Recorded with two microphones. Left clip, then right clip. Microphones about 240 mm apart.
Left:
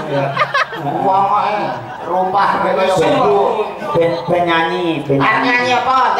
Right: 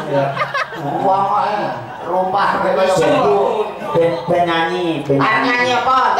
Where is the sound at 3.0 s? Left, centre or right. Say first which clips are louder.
Left 1 dB; centre.